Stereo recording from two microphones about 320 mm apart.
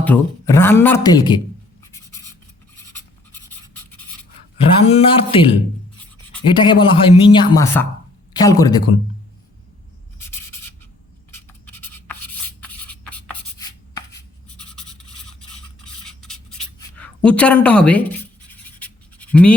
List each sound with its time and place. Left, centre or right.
0.0 s speech: centre
2.7 s scratch: centre
4.9 s speech: centre
6.5 s speech: centre
10.2 s writing: centre
18.8 s scratch: centre